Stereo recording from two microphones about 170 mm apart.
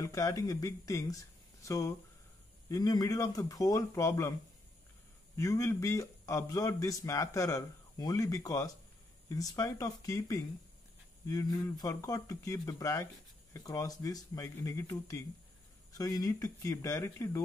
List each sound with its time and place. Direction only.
0.0 s speech: 20° left (ahead or behind)
5.3 s a man's voice: 15° left (ahead or behind)